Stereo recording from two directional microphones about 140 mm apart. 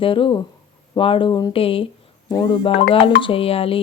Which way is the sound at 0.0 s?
40° left (ahead or behind).